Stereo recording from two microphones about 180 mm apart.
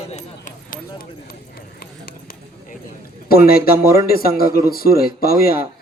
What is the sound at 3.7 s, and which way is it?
Speech, 15° right (ahead or behind).